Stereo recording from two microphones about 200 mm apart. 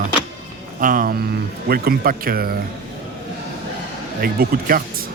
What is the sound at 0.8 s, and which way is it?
Speech, 45° right (ahead or behind).